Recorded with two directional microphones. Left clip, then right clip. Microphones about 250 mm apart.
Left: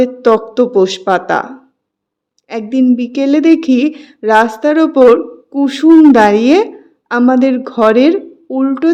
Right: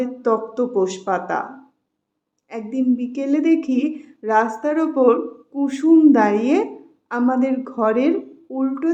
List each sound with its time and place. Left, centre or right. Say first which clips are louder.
0.0 s speech: left 10 dB; left
2.5 s speech: left 9 dB; left